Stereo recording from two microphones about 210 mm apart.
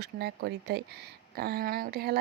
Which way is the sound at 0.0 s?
50° right (ahead or behind).